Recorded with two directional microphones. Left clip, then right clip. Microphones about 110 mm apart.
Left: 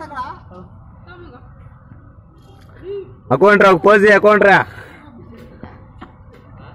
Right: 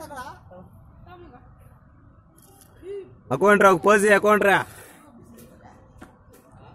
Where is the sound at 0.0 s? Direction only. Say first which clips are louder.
Left 10 dB; 20° right (ahead or behind).